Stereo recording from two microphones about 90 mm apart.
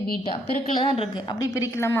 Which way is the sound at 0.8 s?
90° left.